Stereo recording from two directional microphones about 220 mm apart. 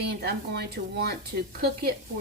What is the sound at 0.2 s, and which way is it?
Speech, 45° right (ahead or behind).